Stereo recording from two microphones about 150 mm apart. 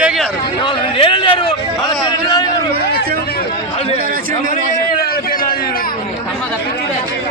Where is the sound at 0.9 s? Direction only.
35° left (ahead or behind).